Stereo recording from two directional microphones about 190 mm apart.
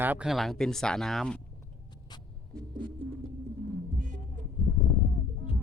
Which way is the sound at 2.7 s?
25° right (ahead or behind).